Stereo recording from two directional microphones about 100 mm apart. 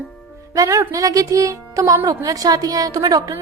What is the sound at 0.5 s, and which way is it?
A woman's voice, 35° right (ahead or behind).